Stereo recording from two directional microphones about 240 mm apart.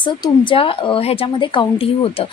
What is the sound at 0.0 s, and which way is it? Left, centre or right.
Speech, centre.